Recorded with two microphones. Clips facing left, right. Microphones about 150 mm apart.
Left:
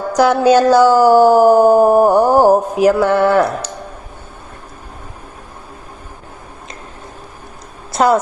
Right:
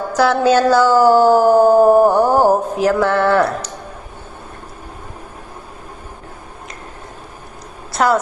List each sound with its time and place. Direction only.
0.1 s speech: 15° left (ahead or behind)
7.9 s a woman's voice: 20° left (ahead or behind)